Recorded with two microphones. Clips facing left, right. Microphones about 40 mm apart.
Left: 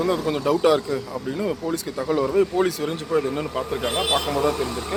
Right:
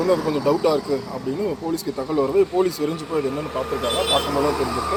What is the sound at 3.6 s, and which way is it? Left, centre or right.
Speech, right.